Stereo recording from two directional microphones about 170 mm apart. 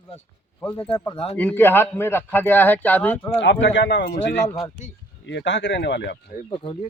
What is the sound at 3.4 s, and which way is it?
Speech, 90° left.